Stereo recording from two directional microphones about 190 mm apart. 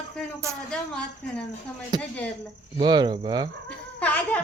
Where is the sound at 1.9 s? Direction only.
20° right (ahead or behind).